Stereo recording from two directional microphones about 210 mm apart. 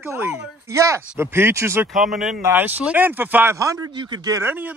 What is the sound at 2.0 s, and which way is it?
Speech, centre (ahead or behind).